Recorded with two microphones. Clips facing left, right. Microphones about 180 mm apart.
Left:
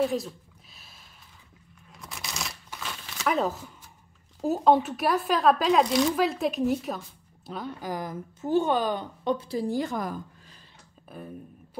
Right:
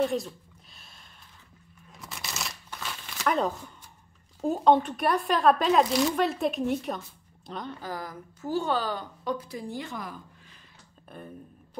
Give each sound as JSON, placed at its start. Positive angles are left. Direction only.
{"t": 0.0, "sound": "speech", "side_deg": 0}
{"t": 1.9, "sound": "a sound", "side_deg": 0}
{"t": 4.4, "sound": "speech", "side_deg": 5}
{"t": 7.9, "sound": "a woman's voice", "side_deg": 20}
{"t": 11.1, "sound": "speech", "side_deg": 5}